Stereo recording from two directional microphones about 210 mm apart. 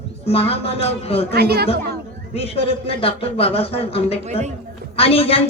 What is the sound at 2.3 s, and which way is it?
Speech, 25° left (ahead or behind).